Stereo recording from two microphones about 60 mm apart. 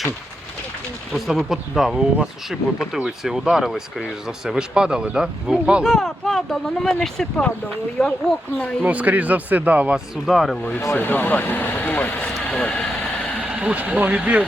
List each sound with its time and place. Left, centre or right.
1.1 s speech: centre
3.2 s speech: centre
5.8 s speech: centre
8.8 s speech: right
10.2 s speech: centre
10.9 s speech: left
12.5 s speech: centre
13.4 s a sound: centre
13.7 s speech: right